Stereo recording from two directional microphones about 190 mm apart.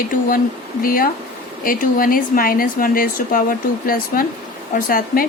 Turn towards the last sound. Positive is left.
turn(degrees=50)  # may be behind; listen again after turning